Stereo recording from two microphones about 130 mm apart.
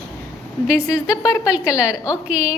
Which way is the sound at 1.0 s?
25° left (ahead or behind).